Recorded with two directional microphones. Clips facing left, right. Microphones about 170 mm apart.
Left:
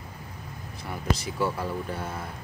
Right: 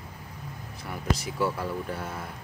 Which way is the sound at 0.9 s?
5° right (ahead or behind).